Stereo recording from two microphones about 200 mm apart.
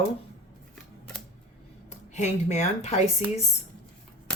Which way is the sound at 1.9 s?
35° left (ahead or behind).